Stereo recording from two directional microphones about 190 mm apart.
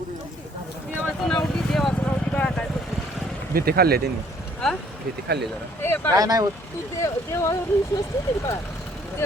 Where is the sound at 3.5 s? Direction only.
55° right (ahead or behind).